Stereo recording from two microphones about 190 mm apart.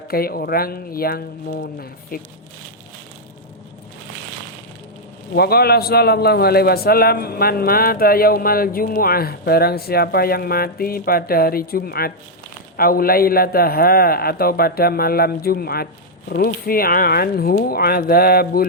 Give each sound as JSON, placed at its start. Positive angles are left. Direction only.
{"t": 0.1, "sound": "a man's voice", "side_deg": 50}
{"t": 5.3, "sound": "a man's voice", "side_deg": 55}